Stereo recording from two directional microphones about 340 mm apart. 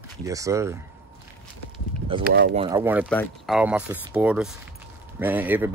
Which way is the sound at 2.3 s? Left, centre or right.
Right.